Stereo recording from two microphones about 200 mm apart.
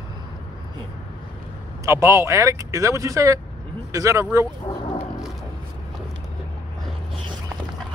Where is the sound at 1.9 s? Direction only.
15° right (ahead or behind).